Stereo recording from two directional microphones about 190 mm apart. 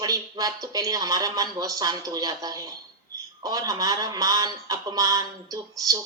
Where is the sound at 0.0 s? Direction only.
20° right (ahead or behind).